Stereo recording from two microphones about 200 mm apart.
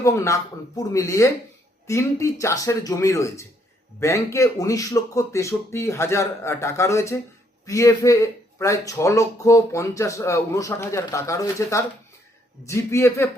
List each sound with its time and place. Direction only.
0.0 s a man's voice: 15° left (ahead or behind)